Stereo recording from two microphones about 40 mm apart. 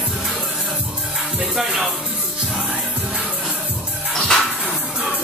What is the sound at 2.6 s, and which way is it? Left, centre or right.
Music, right.